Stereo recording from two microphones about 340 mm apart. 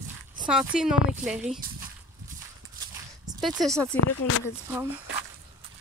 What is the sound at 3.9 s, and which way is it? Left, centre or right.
Speech, left.